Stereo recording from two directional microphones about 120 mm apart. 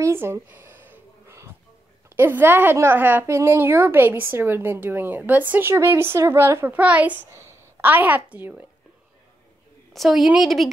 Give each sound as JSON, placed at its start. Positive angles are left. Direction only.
{"t": 0.0, "sound": "a sound", "side_deg": -20}
{"t": 2.0, "sound": "a woman's voice", "side_deg": -20}
{"t": 9.9, "sound": "a woman's voice", "side_deg": 0}